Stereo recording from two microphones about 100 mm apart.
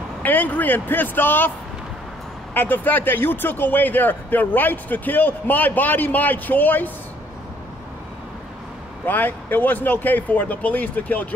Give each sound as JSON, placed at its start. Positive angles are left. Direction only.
{"t": 0.2, "sound": "speech", "side_deg": 15}
{"t": 2.5, "sound": "a man's voice", "side_deg": 20}
{"t": 9.0, "sound": "a man's voice", "side_deg": 20}